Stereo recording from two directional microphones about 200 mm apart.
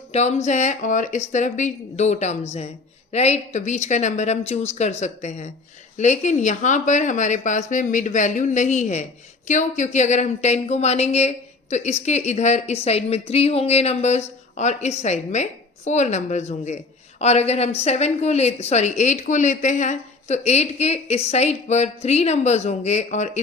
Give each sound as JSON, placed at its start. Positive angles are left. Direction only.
{"t": 0.1, "sound": "speech", "side_deg": 35}